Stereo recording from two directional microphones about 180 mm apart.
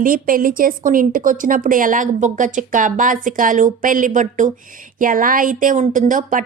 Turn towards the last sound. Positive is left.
turn(degrees=-45)  # may be behind; listen again after turning